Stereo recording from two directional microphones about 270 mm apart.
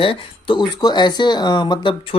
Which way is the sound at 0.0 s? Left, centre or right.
Centre.